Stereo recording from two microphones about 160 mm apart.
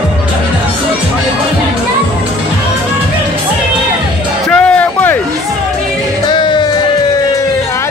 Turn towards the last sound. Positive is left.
turn(degrees=30)  # may be behind; listen again after turning